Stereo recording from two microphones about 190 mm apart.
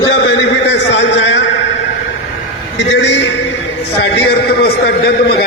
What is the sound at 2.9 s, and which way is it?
A man's voice, 70° left (ahead or behind).